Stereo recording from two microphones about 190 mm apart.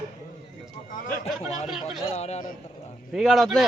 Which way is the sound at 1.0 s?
35° left (ahead or behind).